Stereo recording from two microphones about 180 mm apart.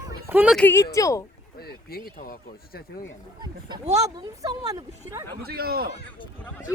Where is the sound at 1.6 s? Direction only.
60° left (ahead or behind).